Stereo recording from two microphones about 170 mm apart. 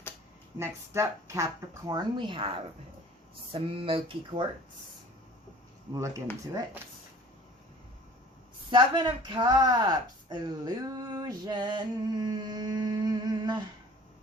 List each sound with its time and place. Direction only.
0.6 s speech: 15° right (ahead or behind)
1.9 s speech: 25° right (ahead or behind)
3.5 s speech: 30° right (ahead or behind)
5.9 s speech: 15° right (ahead or behind)
8.7 s speech: 25° right (ahead or behind)